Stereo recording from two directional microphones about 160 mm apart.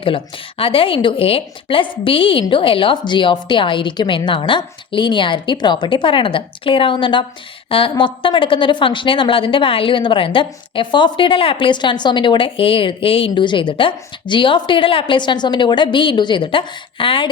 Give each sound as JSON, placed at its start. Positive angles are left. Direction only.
{"t": 0.0, "sound": "a woman's voice", "side_deg": 35}